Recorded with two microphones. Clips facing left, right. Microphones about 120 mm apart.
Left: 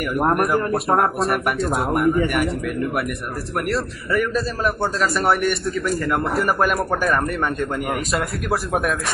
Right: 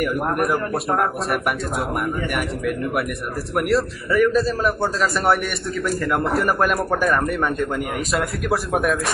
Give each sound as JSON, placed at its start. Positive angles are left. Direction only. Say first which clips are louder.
{"t": 0.4, "sound": "a man's voice", "louder": "left 2 dB", "side_deg": 0}
{"t": 2.3, "sound": "a man's voice", "louder": "left 2 dB", "side_deg": 0}